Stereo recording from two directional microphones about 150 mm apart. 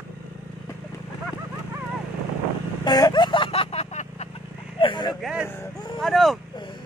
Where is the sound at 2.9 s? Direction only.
25° left (ahead or behind); by 4.3 s 45° left (ahead or behind).